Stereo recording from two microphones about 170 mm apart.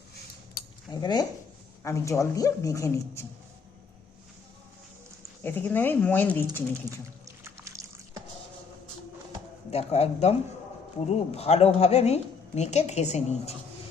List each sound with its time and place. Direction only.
0.9 s speech: 25° left (ahead or behind)
5.4 s speech: 10° left (ahead or behind)
6.9 s music: 20° right (ahead or behind)
7.6 s liquid: 20° right (ahead or behind)
9.6 s a woman's voice: 40° left (ahead or behind)